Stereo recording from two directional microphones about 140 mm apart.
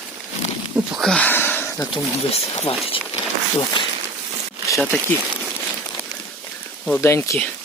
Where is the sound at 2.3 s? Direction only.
45° left (ahead or behind).